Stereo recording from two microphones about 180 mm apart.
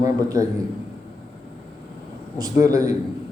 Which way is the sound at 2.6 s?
20° right (ahead or behind).